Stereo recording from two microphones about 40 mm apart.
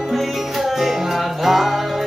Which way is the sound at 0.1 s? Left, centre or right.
Centre.